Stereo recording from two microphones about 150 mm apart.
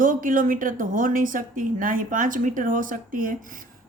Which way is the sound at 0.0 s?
65° right (ahead or behind).